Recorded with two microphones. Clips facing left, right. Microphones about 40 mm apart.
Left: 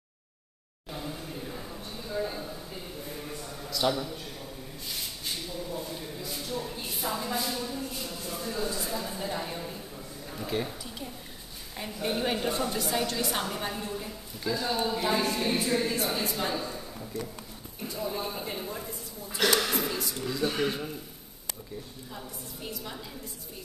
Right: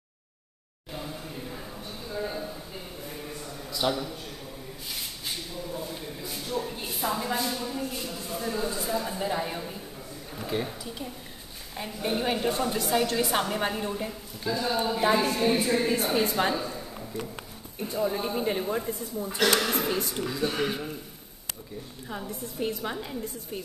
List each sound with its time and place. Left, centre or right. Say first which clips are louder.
0.9 s a sound: right 1 dB; centre
3.7 s a woman's voice: even; centre
5.2 s a sound: left 1 dB; centre
8.7 s a woman's voice: right 4 dB; centre
13.1 s a woman's voice: right 5 dB; centre
13.6 s a woman's voice: right 5 dB; right
14.4 s a woman's voice: right 2 dB; centre; by 16.3 s right
16.5 s a man's voice: right 2 dB; centre
17.7 s a woman's voice: right 5 dB; right
20.2 s a woman's voice: left 2 dB; centre
22.3 s a woman's voice: right 9 dB; right